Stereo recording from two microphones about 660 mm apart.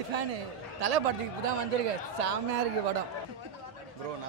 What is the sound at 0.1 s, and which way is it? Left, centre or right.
A man's voice, right.